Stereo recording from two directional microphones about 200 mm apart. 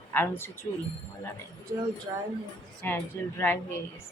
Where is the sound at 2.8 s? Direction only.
10° left (ahead or behind).